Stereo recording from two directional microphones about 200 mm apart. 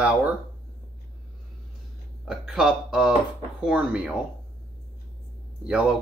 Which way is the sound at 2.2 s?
Centre (ahead or behind).